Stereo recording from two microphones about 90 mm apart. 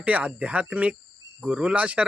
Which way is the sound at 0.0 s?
15° right (ahead or behind).